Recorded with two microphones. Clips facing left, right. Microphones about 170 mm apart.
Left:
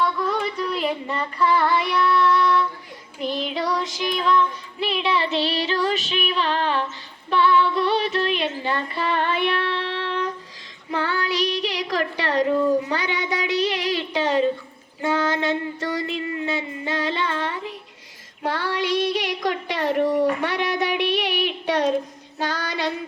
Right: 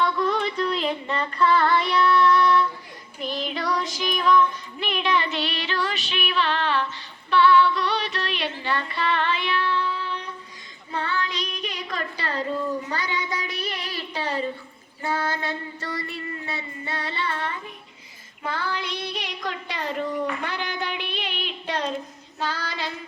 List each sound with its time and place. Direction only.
0.0 s female singing: 5° left (ahead or behind); by 2.6 s 20° left (ahead or behind)
3.2 s child singing: 20° left (ahead or behind); by 6.8 s 40° left (ahead or behind)
7.6 s female singing: 25° left (ahead or behind)
8.6 s a sound: 25° left (ahead or behind)
9.0 s child singing: 45° left (ahead or behind); by 14.0 s 75° left (ahead or behind)
14.1 s a sound: 75° left (ahead or behind)
15.0 s female singing: 75° left (ahead or behind)
16.0 s child singing: 90° left
18.4 s female singing: 75° left (ahead or behind)
19.5 s a woman's voice: 75° left (ahead or behind)
20.4 s a sound: 75° left (ahead or behind)
22.4 s female singing: 70° left (ahead or behind)